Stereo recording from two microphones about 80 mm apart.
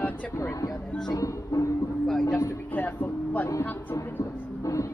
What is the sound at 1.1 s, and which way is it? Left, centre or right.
Speech, left.